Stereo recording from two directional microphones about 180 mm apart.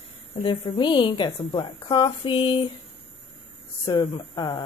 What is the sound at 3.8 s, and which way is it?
Speech, 25° left (ahead or behind).